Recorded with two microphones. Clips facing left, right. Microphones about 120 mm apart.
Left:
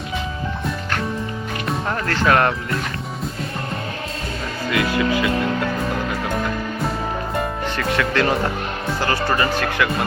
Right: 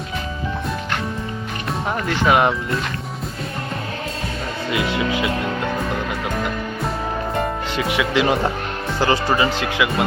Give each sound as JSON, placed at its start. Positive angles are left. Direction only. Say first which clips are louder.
{"t": 1.9, "sound": "speech", "louder": "right 1 dB", "side_deg": -15}
{"t": 4.7, "sound": "speech", "louder": "left 2 dB", "side_deg": -25}
{"t": 7.8, "sound": "speech", "louder": "right 1 dB", "side_deg": -15}